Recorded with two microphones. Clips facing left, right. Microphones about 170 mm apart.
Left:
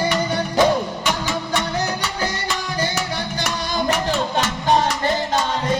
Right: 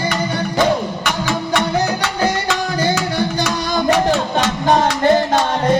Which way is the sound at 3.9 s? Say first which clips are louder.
Right 5 dB; 80° right.